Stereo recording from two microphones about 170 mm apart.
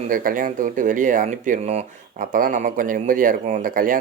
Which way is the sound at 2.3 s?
50° right (ahead or behind).